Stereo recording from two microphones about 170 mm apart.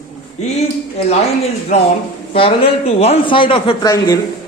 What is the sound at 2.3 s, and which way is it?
A woman's voice, 35° left (ahead or behind).